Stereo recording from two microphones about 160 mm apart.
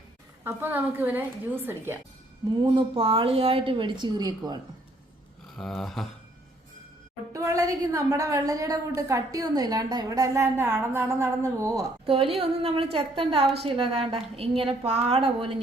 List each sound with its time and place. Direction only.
0.4 s a woman's voice: 10° right (ahead or behind)
2.6 s a woman's voice: 35° right (ahead or behind)
5.5 s a sound: centre (ahead or behind)
7.3 s a woman's voice: 20° right (ahead or behind)
12.0 s a woman's voice: 35° right (ahead or behind)